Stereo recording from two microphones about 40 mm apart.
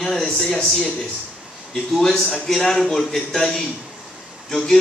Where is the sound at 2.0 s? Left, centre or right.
Centre.